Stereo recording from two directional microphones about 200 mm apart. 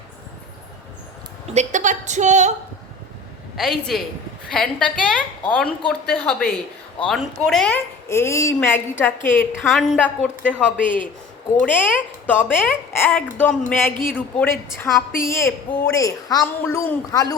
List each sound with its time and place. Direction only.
1.5 s a woman's voice: 40° right (ahead or behind)
3.6 s a woman's voice: centre (ahead or behind); by 17.3 s 15° left (ahead or behind)